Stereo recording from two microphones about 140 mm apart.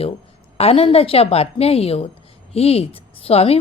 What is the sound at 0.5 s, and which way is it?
A woman's voice, 45° left (ahead or behind).